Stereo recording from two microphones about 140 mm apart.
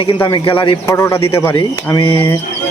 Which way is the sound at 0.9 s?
20° left (ahead or behind).